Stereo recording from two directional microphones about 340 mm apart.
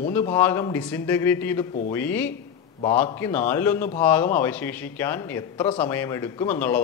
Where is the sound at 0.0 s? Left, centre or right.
Centre.